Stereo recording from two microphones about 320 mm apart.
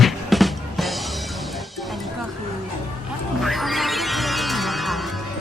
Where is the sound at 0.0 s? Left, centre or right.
Centre.